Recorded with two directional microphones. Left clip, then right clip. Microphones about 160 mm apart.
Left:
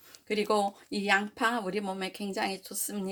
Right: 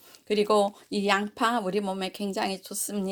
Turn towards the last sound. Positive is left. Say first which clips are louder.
# right 4 dB
turn(degrees=-45)  # may be behind; listen again after turning